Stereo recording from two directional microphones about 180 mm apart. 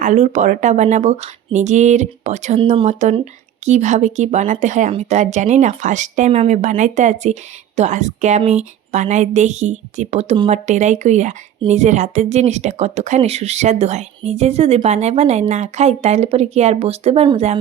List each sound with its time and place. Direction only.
0.0 s speech: 40° right (ahead or behind)